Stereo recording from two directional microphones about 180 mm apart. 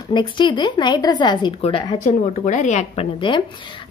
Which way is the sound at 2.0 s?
45° left (ahead or behind).